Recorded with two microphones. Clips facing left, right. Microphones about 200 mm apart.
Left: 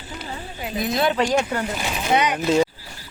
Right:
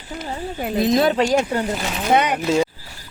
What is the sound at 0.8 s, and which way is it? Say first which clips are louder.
Speech: right 5 dB; 35° right (ahead or behind).